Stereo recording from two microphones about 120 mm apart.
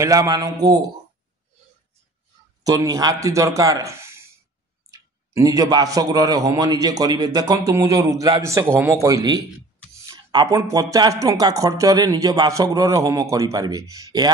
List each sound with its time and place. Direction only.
0.0 s a man's voice: 25° right (ahead or behind)
2.6 s speech: 30° right (ahead or behind)